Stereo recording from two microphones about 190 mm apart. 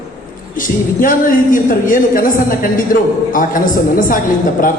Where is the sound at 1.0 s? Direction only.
45° left (ahead or behind).